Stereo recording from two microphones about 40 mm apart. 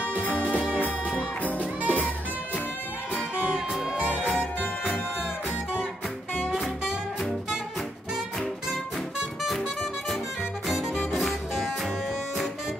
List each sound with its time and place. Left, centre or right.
0.0 s music: right
1.6 s music: right
4.0 s music: right
4.3 s music: left
6.4 s music: centre
11.1 s music: centre